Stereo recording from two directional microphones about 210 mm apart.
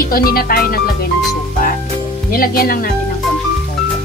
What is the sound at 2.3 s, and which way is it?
Speech, 45° left (ahead or behind).